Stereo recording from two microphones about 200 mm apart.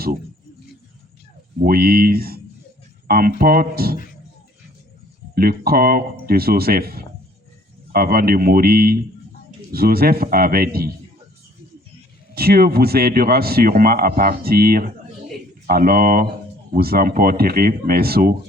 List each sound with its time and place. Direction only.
1.6 s speech: 50° right (ahead or behind)
3.9 s speech: 45° left (ahead or behind)
5.3 s speech: 50° right (ahead or behind)
12.3 s speech: 50° right (ahead or behind)